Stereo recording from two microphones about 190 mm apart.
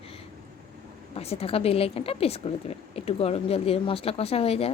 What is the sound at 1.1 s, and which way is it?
Speech, 30° left (ahead or behind).